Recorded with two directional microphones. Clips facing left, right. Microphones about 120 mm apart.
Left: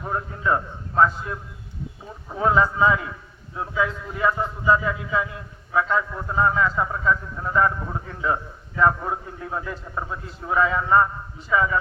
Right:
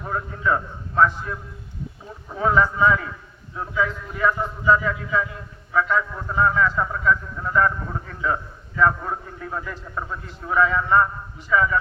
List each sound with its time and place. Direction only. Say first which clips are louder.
0.0 s a man's voice: right 1 dB; 20° left (ahead or behind)